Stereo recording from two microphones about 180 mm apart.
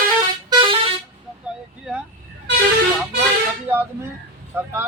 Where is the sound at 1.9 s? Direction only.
5° right (ahead or behind).